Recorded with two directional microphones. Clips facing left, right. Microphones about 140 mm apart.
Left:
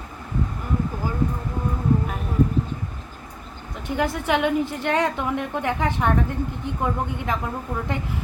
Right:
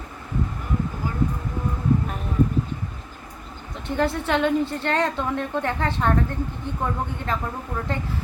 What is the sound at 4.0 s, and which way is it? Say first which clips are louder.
A woman's voice: even; 10° left (ahead or behind).